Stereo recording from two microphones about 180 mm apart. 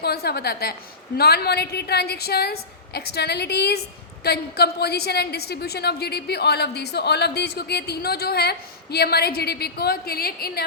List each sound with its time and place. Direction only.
0.0 s a woman's voice: 60° left (ahead or behind)